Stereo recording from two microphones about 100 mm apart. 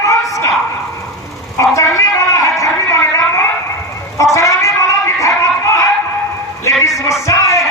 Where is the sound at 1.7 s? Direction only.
30° left (ahead or behind).